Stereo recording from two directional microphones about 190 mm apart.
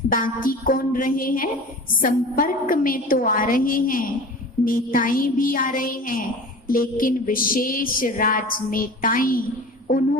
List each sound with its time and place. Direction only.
0.1 s speech: 45° left (ahead or behind)